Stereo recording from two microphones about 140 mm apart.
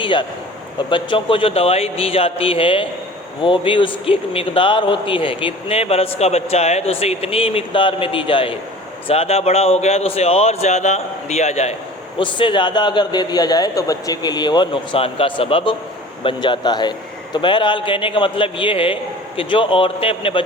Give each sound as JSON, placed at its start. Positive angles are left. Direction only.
{"t": 0.0, "sound": "a man's voice", "side_deg": 35}
{"t": 12.2, "sound": "a man's voice", "side_deg": 35}